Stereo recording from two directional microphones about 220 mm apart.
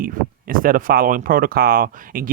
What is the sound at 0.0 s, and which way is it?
Speech, 40° right (ahead or behind).